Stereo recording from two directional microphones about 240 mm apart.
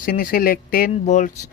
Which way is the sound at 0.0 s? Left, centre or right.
Left.